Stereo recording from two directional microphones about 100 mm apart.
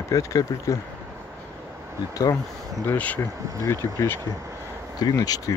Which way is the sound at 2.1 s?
35° left (ahead or behind).